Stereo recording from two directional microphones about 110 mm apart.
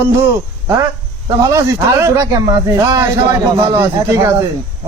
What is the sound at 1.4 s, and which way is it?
A man's voice, 30° right (ahead or behind).